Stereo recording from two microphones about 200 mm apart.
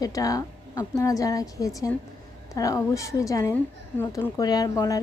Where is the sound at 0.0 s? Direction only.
15° left (ahead or behind).